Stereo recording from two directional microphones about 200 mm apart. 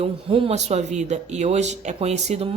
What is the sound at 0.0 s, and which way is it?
A woman's voice, 30° right (ahead or behind).